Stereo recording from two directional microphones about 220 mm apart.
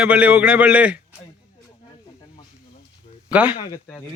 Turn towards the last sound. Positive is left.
turn(degrees=20)  # may be behind; listen again after turning